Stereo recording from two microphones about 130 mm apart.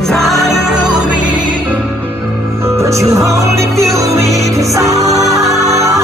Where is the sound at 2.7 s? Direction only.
25° right (ahead or behind).